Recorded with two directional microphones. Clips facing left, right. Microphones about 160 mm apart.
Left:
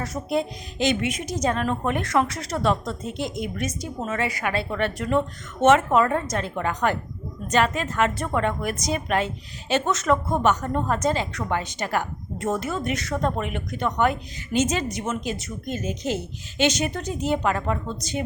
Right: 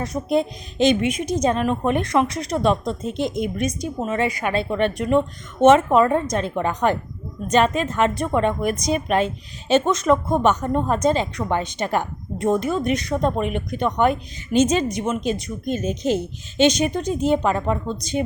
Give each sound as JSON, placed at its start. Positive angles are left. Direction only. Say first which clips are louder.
{"t": 0.0, "sound": "a woman's voice", "louder": "right 4 dB", "side_deg": -20}